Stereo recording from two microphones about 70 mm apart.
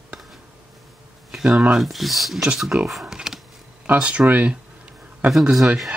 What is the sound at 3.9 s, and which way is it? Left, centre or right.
Speech, centre.